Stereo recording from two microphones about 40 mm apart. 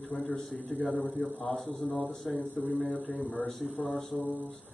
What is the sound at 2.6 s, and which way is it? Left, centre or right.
Speech, left.